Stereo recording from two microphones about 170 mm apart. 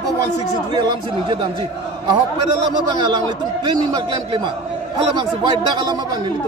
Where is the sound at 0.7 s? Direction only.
25° right (ahead or behind).